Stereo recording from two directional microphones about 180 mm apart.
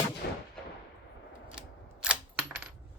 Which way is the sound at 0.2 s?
70° left (ahead or behind).